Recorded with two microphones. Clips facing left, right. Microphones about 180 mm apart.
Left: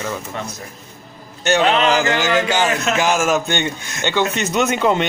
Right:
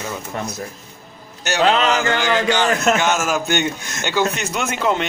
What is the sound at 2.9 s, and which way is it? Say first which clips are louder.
Speech: left 2 dB; centre (ahead or behind).